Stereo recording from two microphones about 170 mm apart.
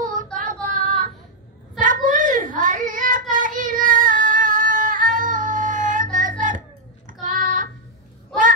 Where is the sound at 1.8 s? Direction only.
50° right (ahead or behind).